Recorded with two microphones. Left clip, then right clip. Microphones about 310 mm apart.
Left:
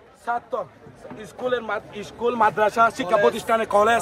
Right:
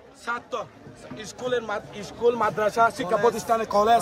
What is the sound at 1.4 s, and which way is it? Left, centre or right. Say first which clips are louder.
Speech: left 2 dB; centre.